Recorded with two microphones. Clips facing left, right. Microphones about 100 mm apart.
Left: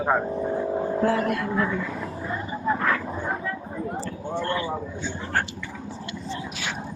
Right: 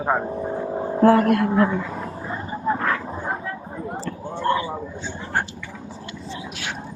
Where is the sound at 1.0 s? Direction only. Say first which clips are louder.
Right 10 dB; 55° right (ahead or behind).